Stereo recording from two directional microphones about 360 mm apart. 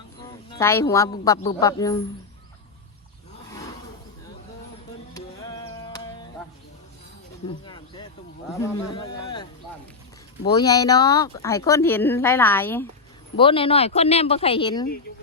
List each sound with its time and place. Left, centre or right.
0.2 s a woman's voice: centre
5.1 s music: centre
7.4 s cricket: centre
8.6 s speech: centre